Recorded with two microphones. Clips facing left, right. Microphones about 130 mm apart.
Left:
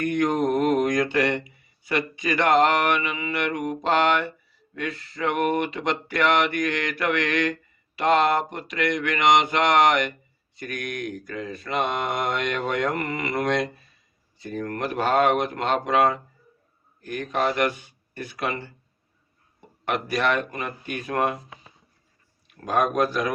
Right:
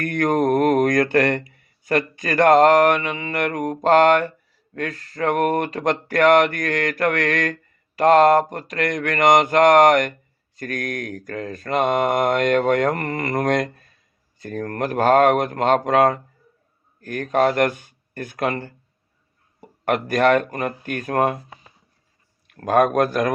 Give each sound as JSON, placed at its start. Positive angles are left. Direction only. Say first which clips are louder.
{"t": 0.0, "sound": "mantra", "louder": "right 3 dB", "side_deg": -50}
{"t": 17.0, "sound": "speech", "louder": "right 6 dB", "side_deg": -50}
{"t": 19.8, "sound": "mantra", "louder": "right 6 dB", "side_deg": -50}
{"t": 22.6, "sound": "mantra", "louder": "right 5 dB", "side_deg": -50}